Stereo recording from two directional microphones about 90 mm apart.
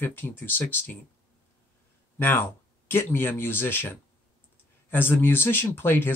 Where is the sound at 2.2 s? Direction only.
25° left (ahead or behind).